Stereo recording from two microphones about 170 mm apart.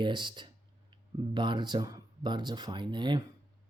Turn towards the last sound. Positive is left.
turn(degrees=-25)  # may be behind; listen again after turning